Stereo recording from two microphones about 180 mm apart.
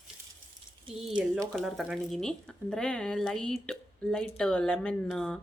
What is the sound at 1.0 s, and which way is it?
Speech, centre (ahead or behind).